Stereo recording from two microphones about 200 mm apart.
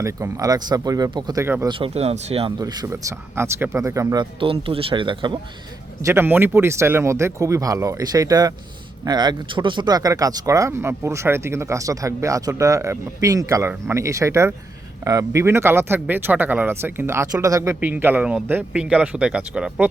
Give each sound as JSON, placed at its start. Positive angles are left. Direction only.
{"t": 0.0, "sound": "speech", "side_deg": -15}
{"t": 1.8, "sound": "speech", "side_deg": -30}
{"t": 2.6, "sound": "speech", "side_deg": -20}
{"t": 6.1, "sound": "speech", "side_deg": -10}